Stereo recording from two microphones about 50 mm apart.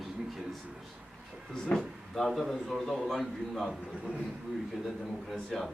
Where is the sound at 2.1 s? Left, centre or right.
Centre.